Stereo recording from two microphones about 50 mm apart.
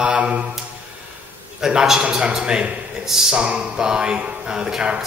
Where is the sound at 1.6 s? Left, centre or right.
Centre.